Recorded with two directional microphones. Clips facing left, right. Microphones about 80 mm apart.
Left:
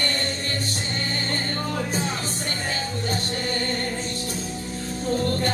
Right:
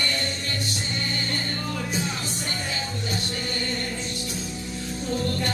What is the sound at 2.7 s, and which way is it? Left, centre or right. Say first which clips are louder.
Music: left 3 dB; left.